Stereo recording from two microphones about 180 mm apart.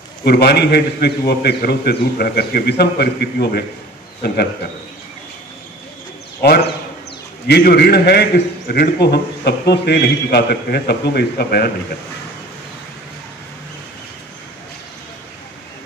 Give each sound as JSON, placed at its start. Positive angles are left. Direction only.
{"t": 0.2, "sound": "a man's voice", "side_deg": 65}
{"t": 7.4, "sound": "a man's voice", "side_deg": 60}